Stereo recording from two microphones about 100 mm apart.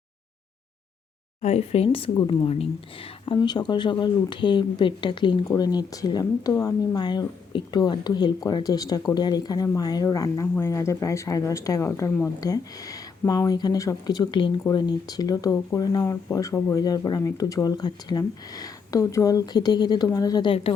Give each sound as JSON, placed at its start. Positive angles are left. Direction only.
{"t": 1.5, "sound": "speech", "side_deg": 90}
{"t": 3.3, "sound": "speech", "side_deg": 45}
{"t": 5.5, "sound": "speech", "side_deg": 40}
{"t": 6.5, "sound": "a woman's voice", "side_deg": 30}
{"t": 6.9, "sound": "speech", "side_deg": 45}